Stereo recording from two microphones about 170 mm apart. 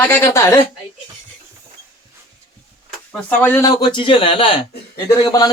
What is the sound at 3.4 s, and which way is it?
Speech, 15° left (ahead or behind).